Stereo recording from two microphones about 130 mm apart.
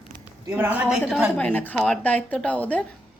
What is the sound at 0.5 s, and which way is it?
Speech, 15° right (ahead or behind).